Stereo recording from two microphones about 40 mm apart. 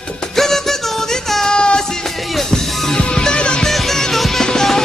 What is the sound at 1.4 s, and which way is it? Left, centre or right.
Music, left.